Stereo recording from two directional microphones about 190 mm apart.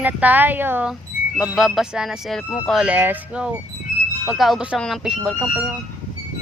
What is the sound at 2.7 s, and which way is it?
Speech, 5° right (ahead or behind).